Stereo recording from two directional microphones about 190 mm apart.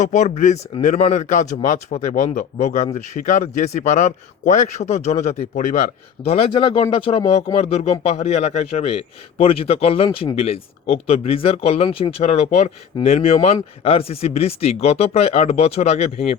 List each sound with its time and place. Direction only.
0.0 s speech: 40° left (ahead or behind)